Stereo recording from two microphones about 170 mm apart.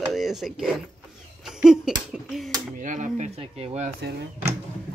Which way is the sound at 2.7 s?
50° right (ahead or behind).